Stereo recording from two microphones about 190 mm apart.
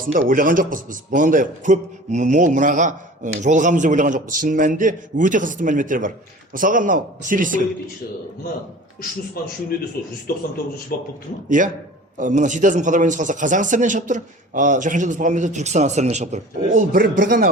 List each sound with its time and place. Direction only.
0.0 s a man's voice: 45° right (ahead or behind)
9.4 s a man's voice: 50° left (ahead or behind)
11.4 s a man's voice: 45° right (ahead or behind)